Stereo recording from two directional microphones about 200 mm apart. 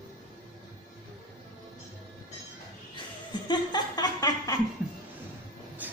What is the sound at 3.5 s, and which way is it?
Chuckle, 20° left (ahead or behind).